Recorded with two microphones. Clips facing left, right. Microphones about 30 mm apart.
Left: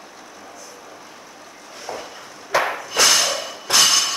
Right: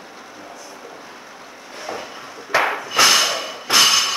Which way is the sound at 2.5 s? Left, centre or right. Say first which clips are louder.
Right 2 dB; centre.